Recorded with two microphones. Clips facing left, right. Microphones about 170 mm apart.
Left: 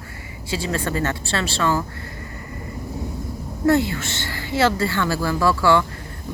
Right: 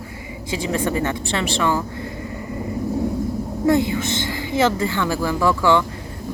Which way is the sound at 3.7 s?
15° right (ahead or behind).